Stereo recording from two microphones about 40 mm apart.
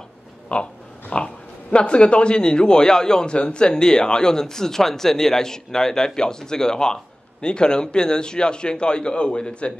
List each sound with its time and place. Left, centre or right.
0.5 s pig: left
1.1 s speech: left